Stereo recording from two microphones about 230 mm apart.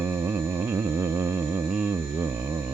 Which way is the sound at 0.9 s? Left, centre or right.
Centre.